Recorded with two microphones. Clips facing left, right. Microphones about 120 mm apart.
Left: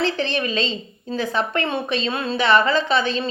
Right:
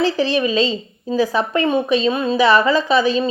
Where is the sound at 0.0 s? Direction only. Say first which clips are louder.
Right 5 dB; 10° right (ahead or behind).